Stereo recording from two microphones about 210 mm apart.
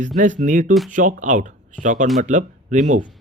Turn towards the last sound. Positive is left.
turn(degrees=-35)  # may be behind; listen again after turning